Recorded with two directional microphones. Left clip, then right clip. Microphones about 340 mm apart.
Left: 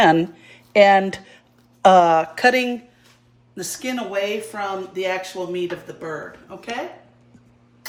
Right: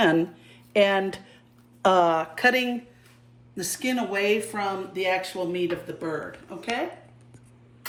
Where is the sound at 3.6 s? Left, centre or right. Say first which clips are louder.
Left 1 dB; centre.